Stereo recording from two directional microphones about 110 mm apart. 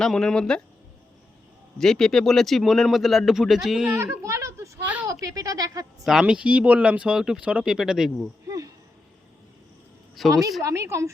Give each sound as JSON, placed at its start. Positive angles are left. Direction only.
{"t": 0.0, "sound": "speech", "side_deg": 5}
{"t": 1.8, "sound": "speech", "side_deg": 5}
{"t": 3.9, "sound": "a sound", "side_deg": -25}
{"t": 5.2, "sound": "speech", "side_deg": -30}
{"t": 6.1, "sound": "speech", "side_deg": -5}
{"t": 8.4, "sound": "a sound", "side_deg": -30}
{"t": 10.2, "sound": "speech", "side_deg": -35}